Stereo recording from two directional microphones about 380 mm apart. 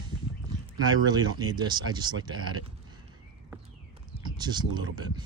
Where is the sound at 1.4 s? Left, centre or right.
Centre.